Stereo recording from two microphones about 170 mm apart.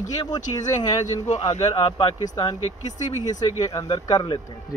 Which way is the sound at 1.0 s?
40° left (ahead or behind).